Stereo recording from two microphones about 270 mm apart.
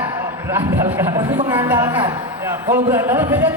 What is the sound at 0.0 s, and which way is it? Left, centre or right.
A man's voice, centre.